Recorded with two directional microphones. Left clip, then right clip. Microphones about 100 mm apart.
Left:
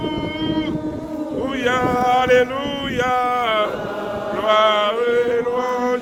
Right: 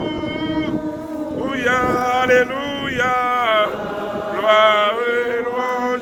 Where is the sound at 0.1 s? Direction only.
10° left (ahead or behind).